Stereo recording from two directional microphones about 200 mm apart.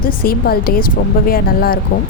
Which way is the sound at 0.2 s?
50° left (ahead or behind).